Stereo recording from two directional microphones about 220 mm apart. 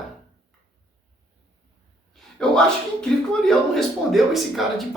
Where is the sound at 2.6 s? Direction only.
Centre (ahead or behind).